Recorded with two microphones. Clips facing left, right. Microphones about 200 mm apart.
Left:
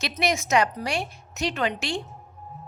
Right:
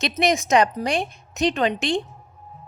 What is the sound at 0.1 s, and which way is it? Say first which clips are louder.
Speech: right 3 dB; 15° right (ahead or behind).